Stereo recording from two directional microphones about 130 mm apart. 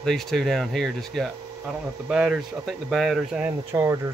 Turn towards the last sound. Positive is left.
turn(degrees=-20)  # may be behind; listen again after turning